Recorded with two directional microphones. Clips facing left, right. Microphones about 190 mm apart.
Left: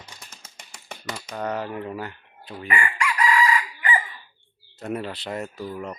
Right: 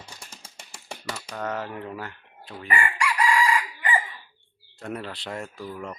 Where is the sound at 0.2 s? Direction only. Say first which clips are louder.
Right 1 dB; 10° right (ahead or behind).